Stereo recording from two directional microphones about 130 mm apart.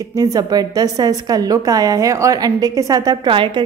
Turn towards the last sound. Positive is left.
turn(degrees=-40)  # may be behind; listen again after turning